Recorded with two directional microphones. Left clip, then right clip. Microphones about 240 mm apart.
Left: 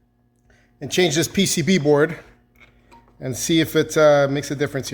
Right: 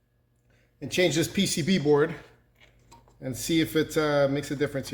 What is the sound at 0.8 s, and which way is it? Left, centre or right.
Speech, left.